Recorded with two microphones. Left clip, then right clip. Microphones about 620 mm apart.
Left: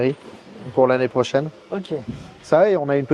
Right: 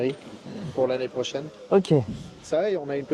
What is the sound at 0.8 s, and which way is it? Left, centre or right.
Speech, left.